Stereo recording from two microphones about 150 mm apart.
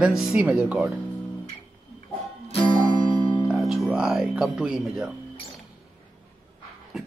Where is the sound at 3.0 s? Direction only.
30° left (ahead or behind).